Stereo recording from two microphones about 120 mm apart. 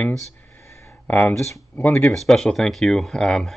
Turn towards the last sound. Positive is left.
turn(degrees=5)  # may be behind; listen again after turning